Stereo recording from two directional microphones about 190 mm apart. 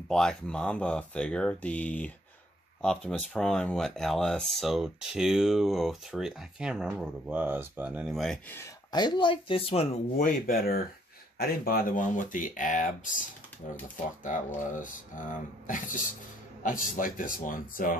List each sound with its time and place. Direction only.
0.1 s speech: 5° left (ahead or behind)
8.5 s speech: 20° left (ahead or behind)
10.1 s speech: 50° left (ahead or behind)
14.6 s speech: 45° left (ahead or behind)